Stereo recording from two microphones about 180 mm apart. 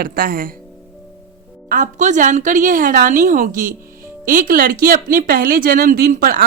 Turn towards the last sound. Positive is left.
turn(degrees=-55)  # may be behind; listen again after turning